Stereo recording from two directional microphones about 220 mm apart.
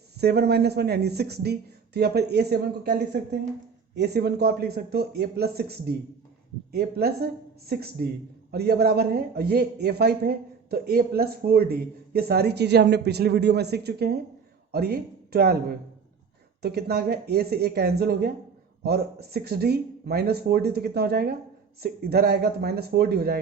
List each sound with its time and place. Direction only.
0.2 s speech: 45° right (ahead or behind)
3.9 s speech: 45° right (ahead or behind)
16.6 s speech: 45° right (ahead or behind)